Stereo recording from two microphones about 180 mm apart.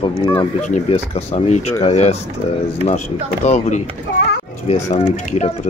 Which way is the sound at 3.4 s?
40° left (ahead or behind).